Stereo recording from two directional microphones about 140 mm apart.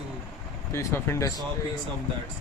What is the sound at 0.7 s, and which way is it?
Speech, 20° left (ahead or behind).